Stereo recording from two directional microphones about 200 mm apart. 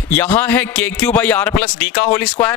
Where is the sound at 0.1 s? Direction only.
10° left (ahead or behind).